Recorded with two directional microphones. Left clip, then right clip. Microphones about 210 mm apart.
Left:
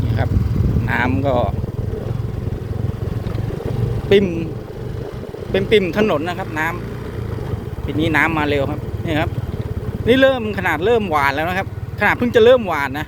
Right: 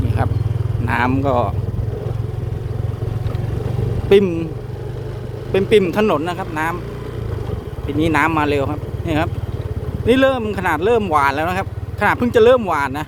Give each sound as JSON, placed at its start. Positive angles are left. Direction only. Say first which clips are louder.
{"t": 0.9, "sound": "speech", "louder": "right 1 dB", "side_deg": -15}
{"t": 4.1, "sound": "speech", "louder": "right 2 dB", "side_deg": -20}
{"t": 5.5, "sound": "speech", "louder": "right 1 dB", "side_deg": -10}
{"t": 7.9, "sound": "speech", "louder": "even", "side_deg": -10}